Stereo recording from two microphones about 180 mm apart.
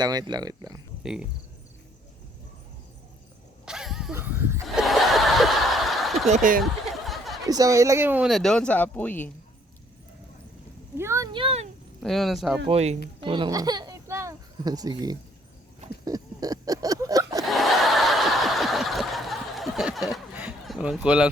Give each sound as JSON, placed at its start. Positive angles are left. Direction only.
{"t": 0.0, "sound": "speech", "side_deg": -20}
{"t": 3.7, "sound": "dog", "side_deg": -5}
{"t": 4.1, "sound": "a sound", "side_deg": -10}
{"t": 4.7, "sound": "snicker", "side_deg": 0}
{"t": 6.2, "sound": "speech", "side_deg": -45}
{"t": 6.6, "sound": "a sound", "side_deg": 0}
{"t": 7.4, "sound": "speech", "side_deg": -20}
{"t": 10.9, "sound": "a sound", "side_deg": -15}
{"t": 12.0, "sound": "speech", "side_deg": 0}
{"t": 12.6, "sound": "a child's voice", "side_deg": -35}
{"t": 16.0, "sound": "a sound", "side_deg": -20}
{"t": 17.4, "sound": "snicker", "side_deg": 0}